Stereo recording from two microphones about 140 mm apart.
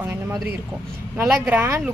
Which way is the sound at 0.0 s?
20° right (ahead or behind).